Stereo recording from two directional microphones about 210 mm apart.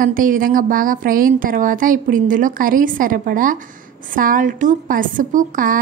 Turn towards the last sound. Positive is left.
turn(degrees=-40)  # may be behind; listen again after turning